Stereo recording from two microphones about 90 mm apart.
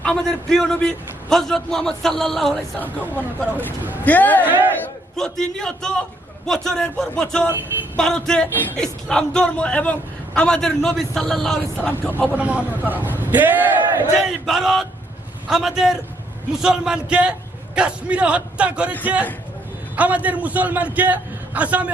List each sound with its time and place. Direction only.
0.0 s a man's voice: 5° left (ahead or behind)
4.0 s a man's voice: 20° left (ahead or behind)
4.4 s a man's voice: 20° right (ahead or behind)
5.1 s a man's voice: 5° left (ahead or behind)
11.8 s a man's voice: 20° left (ahead or behind)
12.4 s a man's voice: 15° right (ahead or behind)
14.2 s a man's voice: centre (ahead or behind)